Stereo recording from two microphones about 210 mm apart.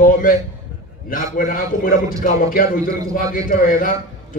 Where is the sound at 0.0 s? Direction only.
40° left (ahead or behind).